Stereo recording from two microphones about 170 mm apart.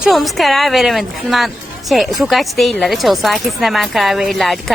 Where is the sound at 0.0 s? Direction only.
Centre (ahead or behind).